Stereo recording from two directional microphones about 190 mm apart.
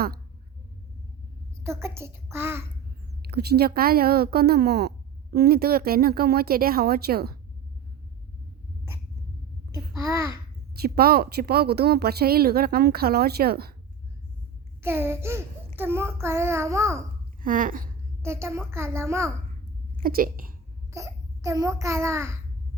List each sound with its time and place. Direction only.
1.6 s child singing: 15° right (ahead or behind)
3.2 s a woman's voice: 55° right (ahead or behind)
9.7 s babbling: 15° right (ahead or behind)
10.8 s a woman's voice: 55° right (ahead or behind)
14.8 s child singing: 10° right (ahead or behind)
17.4 s a woman's voice: 45° right (ahead or behind)
18.2 s child singing: 15° right (ahead or behind)
20.0 s a woman's voice: 50° right (ahead or behind)
20.9 s a child's voice: 15° right (ahead or behind)